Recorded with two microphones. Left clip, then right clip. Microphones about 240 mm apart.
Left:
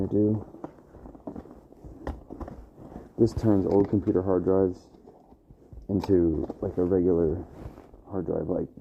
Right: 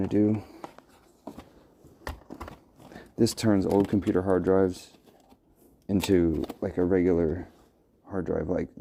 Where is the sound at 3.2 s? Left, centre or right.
Right.